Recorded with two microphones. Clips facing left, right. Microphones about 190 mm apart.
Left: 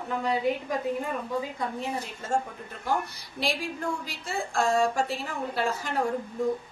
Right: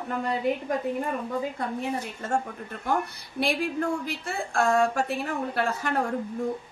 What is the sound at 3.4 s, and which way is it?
A woman's voice, 55° right (ahead or behind).